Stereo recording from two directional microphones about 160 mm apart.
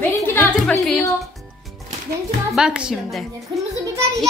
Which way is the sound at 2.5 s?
5° right (ahead or behind).